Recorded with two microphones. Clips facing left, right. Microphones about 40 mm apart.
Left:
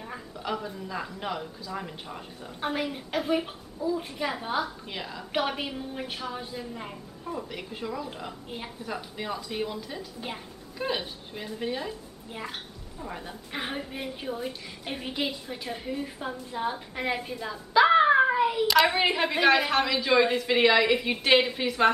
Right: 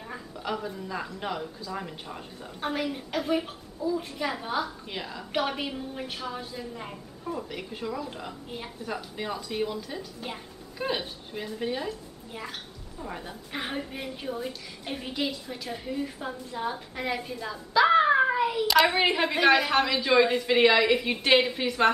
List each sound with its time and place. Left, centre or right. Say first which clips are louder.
0.0 s a woman's voice: even; centre